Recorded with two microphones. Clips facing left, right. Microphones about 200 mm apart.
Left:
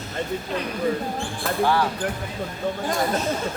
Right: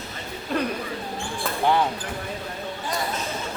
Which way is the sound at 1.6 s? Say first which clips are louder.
Right 1 dB; 20° right (ahead or behind).